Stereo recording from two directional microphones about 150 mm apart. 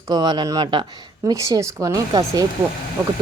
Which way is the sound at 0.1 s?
30° right (ahead or behind).